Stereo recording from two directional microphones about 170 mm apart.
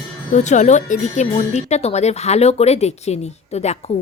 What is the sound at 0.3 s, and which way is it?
Speech, 45° left (ahead or behind).